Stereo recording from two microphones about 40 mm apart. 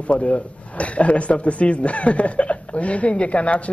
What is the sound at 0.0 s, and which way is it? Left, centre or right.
A man's voice, left.